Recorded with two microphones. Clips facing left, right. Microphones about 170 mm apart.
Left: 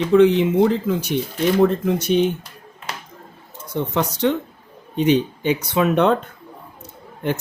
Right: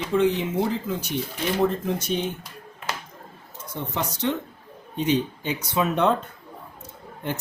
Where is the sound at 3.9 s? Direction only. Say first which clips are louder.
Left 6 dB; 75° left (ahead or behind).